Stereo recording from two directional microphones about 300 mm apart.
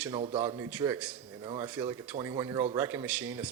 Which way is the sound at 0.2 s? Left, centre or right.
Centre.